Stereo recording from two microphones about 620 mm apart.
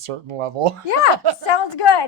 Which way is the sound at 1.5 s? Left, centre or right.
Left.